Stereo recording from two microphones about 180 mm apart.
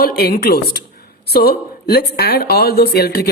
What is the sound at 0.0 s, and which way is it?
A woman's voice, 60° left (ahead or behind).